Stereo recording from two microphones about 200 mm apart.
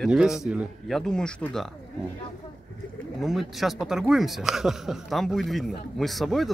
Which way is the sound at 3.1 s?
Centre (ahead or behind).